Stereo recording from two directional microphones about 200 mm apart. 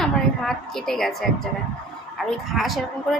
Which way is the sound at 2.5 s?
Centre (ahead or behind).